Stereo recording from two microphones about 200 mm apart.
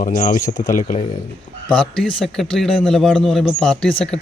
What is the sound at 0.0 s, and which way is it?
Speech, 40° left (ahead or behind).